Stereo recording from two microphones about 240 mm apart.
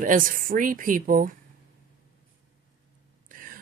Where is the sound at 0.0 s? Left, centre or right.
Right.